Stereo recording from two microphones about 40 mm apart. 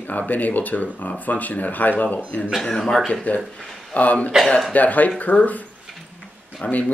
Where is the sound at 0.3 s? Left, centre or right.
Left.